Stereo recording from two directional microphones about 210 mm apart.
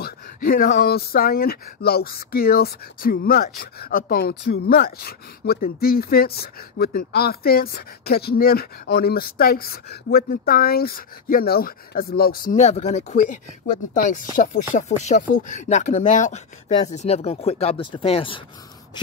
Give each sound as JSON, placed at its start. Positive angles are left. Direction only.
{"t": 0.0, "sound": "speech", "side_deg": 45}